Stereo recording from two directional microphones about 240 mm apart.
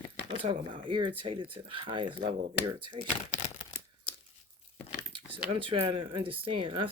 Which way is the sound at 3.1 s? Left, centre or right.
Left.